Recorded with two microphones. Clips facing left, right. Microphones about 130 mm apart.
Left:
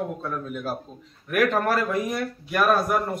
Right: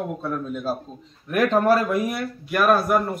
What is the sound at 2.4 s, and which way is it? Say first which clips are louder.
Speech: right 3 dB; centre (ahead or behind).